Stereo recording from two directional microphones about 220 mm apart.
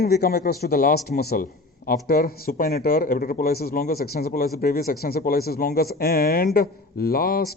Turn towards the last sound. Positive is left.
turn(degrees=45)  # may be behind; listen again after turning